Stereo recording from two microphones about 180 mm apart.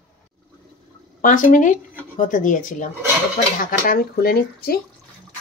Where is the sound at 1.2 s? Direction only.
45° left (ahead or behind).